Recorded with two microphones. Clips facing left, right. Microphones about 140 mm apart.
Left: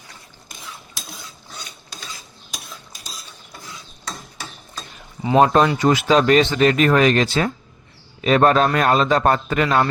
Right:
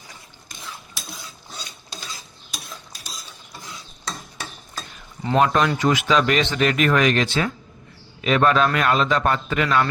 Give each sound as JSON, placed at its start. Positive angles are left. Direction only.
{"t": 5.4, "sound": "speech", "side_deg": 35}